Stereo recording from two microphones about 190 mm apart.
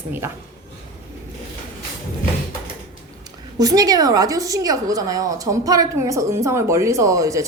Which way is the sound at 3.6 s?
20° right (ahead or behind).